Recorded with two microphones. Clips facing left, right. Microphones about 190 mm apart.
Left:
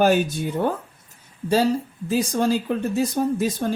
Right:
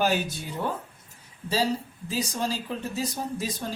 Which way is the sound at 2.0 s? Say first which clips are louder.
Left 9 dB; 55° left (ahead or behind).